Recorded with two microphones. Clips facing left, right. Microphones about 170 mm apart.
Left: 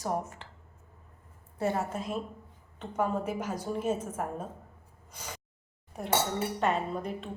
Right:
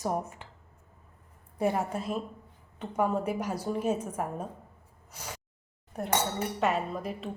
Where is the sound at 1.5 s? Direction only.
15° right (ahead or behind).